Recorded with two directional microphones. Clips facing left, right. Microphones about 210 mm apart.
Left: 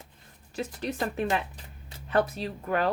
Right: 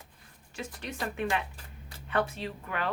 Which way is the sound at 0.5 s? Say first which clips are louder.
Left 6 dB; 35° left (ahead or behind).